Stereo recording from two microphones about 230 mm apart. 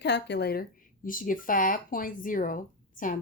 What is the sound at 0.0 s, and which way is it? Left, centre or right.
A woman's voice, left.